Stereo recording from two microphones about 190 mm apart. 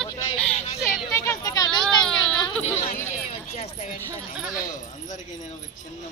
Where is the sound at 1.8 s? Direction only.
5° left (ahead or behind).